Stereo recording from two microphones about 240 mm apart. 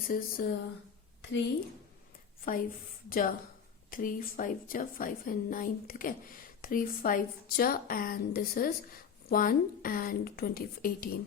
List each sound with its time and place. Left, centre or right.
0.1 s a woman's voice: left
2.5 s a woman's voice: left